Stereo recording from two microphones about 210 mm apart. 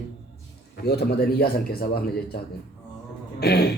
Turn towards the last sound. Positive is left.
turn(degrees=50)  # may be behind; listen again after turning